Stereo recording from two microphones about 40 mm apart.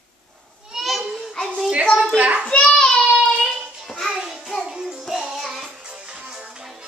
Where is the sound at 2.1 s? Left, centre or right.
Right.